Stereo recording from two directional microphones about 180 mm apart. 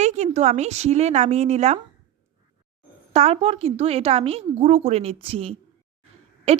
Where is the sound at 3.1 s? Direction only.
35° right (ahead or behind).